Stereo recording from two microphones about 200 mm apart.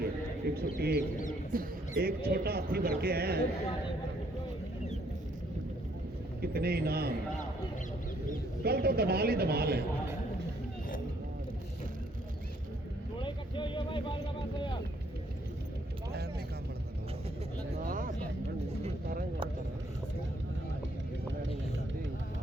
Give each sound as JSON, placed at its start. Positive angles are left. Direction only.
{"t": 0.0, "sound": "bird", "side_deg": -50}
{"t": 0.8, "sound": "speech", "side_deg": -55}
{"t": 6.4, "sound": "a man's voice", "side_deg": -50}
{"t": 8.6, "sound": "speech", "side_deg": -50}
{"t": 13.1, "sound": "vehicle", "side_deg": 25}
{"t": 17.7, "sound": "vehicle", "side_deg": -45}